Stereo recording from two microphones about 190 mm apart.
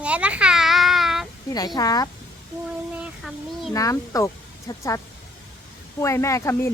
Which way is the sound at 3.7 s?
15° left (ahead or behind).